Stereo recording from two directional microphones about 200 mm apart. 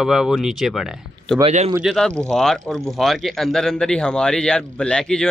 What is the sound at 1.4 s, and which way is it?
Speech, 30° right (ahead or behind).